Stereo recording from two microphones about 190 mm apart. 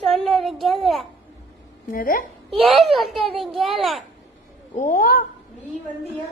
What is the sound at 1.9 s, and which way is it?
Speech, 50° left (ahead or behind).